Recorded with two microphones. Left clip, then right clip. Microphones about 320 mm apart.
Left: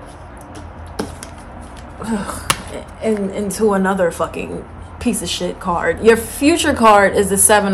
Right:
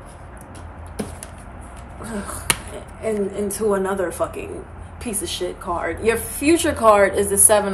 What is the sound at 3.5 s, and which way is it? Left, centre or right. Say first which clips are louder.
A woman's voice: left 7 dB; left.